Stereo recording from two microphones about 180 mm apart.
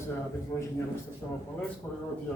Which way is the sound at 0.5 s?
15° left (ahead or behind).